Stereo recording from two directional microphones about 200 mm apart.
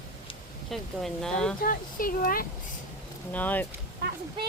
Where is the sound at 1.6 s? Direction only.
45° left (ahead or behind).